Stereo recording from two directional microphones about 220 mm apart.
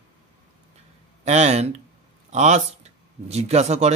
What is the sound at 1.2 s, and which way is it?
A man's voice, 30° right (ahead or behind).